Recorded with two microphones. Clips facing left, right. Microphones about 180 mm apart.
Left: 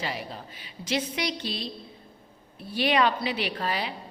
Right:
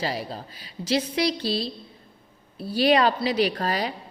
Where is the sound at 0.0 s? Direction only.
35° right (ahead or behind).